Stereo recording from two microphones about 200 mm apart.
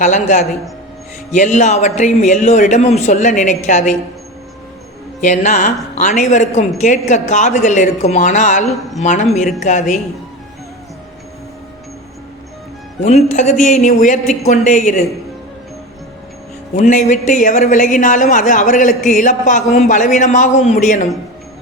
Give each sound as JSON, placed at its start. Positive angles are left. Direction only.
{"t": 0.0, "sound": "speech", "side_deg": 35}
{"t": 5.2, "sound": "speech", "side_deg": 35}
{"t": 13.1, "sound": "speech", "side_deg": 35}
{"t": 16.7, "sound": "speech", "side_deg": 40}